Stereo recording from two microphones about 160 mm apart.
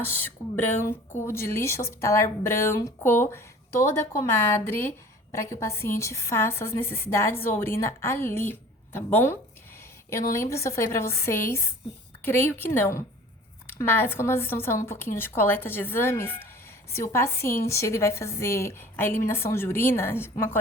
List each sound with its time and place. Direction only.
0.0 s speech: 15° left (ahead or behind)